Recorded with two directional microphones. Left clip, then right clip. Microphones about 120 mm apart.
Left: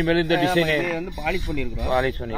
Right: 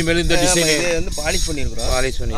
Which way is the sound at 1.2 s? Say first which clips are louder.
Right 3 dB; 70° right (ahead or behind).